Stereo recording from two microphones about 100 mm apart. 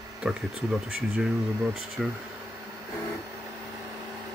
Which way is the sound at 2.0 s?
Centre (ahead or behind).